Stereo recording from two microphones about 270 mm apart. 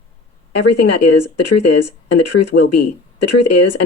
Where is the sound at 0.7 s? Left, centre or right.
Left.